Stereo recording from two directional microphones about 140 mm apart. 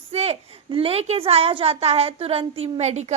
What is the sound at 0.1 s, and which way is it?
A woman's voice, 45° right (ahead or behind).